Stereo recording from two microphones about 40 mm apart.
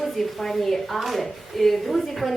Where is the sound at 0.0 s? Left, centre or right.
Centre.